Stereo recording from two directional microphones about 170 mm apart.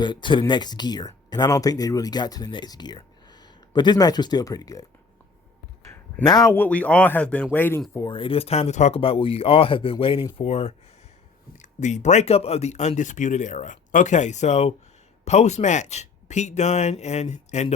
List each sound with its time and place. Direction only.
0.0 s speech: 25° left (ahead or behind)
6.2 s speech: 20° left (ahead or behind)
7.9 s speech: 25° left (ahead or behind)
10.4 s speech: 40° left (ahead or behind)
11.8 s speech: 45° left (ahead or behind)